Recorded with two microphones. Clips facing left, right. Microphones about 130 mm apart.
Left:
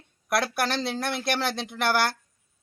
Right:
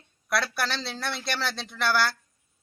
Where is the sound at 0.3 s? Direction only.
50° left (ahead or behind).